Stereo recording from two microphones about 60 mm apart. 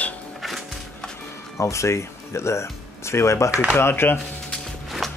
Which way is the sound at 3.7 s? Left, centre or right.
Left.